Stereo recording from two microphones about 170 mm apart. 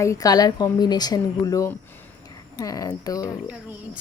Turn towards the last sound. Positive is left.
turn(degrees=20)  # may be behind; listen again after turning